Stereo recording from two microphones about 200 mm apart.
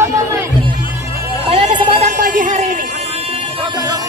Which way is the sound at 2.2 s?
40° right (ahead or behind).